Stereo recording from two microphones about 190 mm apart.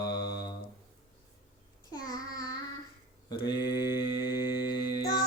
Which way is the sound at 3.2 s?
25° left (ahead or behind).